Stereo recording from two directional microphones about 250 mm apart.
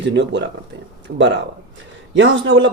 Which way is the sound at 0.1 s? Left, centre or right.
Right.